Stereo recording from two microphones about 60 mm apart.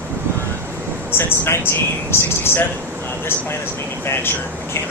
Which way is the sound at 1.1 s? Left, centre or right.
Left.